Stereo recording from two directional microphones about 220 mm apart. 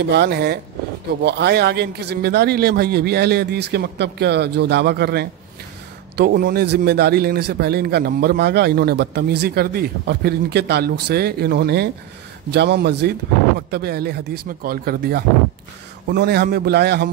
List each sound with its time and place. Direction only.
0.1 s a man's voice: 50° right (ahead or behind)